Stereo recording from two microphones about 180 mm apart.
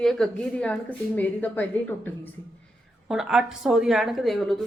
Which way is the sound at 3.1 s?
Centre (ahead or behind).